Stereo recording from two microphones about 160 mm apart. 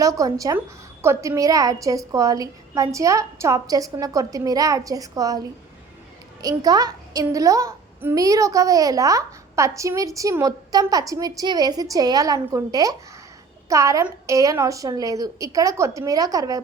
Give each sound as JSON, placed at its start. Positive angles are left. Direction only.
{"t": 0.0, "sound": "a woman's voice", "side_deg": -20}